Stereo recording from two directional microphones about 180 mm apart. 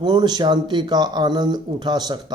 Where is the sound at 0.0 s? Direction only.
25° right (ahead or behind).